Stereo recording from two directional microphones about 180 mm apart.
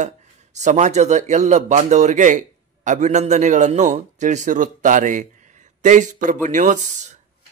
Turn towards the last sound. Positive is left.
turn(degrees=-40)  # may be behind; listen again after turning